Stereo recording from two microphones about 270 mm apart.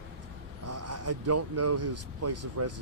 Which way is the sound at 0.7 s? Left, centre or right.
Right.